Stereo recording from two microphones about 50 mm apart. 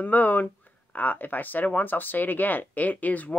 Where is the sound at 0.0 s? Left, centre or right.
Left.